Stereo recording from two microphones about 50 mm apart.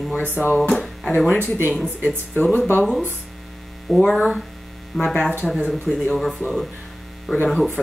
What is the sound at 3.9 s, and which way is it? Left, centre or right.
Speech, centre.